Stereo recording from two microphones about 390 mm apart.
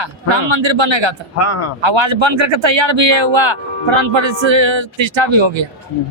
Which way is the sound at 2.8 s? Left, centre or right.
Right.